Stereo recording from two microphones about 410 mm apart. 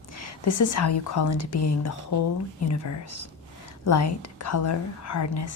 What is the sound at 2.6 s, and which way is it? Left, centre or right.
Speech, left.